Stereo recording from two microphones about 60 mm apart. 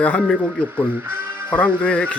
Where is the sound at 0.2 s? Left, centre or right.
Centre.